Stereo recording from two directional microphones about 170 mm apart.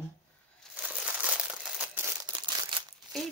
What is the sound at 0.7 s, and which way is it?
Crumpling, 5° right (ahead or behind).